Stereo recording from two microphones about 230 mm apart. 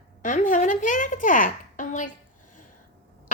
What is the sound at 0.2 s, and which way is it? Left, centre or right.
Speech, left.